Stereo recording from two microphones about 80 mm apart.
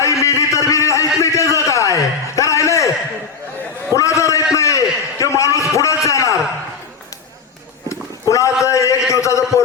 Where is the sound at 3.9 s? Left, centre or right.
Left.